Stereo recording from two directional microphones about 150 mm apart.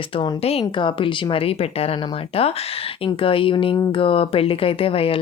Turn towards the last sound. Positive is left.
turn(degrees=40)  # may be behind; listen again after turning